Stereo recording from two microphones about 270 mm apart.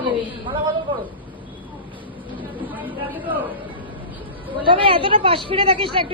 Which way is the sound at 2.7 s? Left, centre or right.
Centre.